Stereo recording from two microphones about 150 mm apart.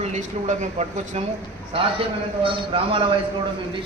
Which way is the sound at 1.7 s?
35° right (ahead or behind).